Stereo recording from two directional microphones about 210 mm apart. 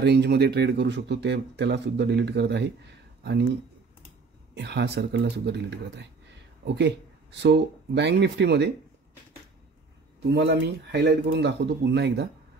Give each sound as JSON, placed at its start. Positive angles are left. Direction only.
{"t": 0.0, "sound": "speech", "side_deg": -50}
{"t": 4.6, "sound": "speech", "side_deg": -55}
{"t": 10.2, "sound": "speech", "side_deg": -55}